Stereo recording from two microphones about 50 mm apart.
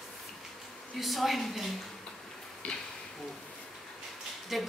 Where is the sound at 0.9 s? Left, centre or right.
Centre.